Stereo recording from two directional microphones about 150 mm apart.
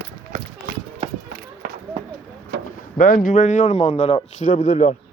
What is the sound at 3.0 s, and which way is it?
A man's voice, 70° left (ahead or behind).